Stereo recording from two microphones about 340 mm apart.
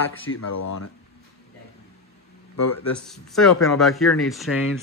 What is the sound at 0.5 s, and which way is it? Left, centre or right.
Speech, left.